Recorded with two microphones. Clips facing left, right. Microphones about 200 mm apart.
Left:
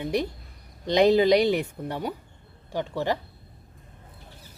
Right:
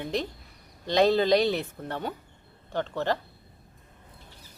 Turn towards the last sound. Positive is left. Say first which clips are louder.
# left 1 dB
turn(degrees=10)  # may be behind; listen again after turning